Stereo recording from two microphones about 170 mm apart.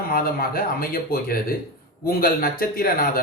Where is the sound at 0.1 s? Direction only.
60° left (ahead or behind).